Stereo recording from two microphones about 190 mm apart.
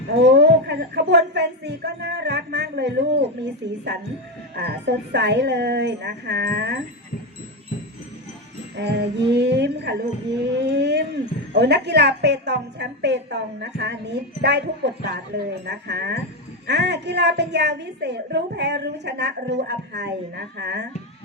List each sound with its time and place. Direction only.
0.3 s a woman's voice: 60° right (ahead or behind)
8.7 s a woman's voice: 60° right (ahead or behind)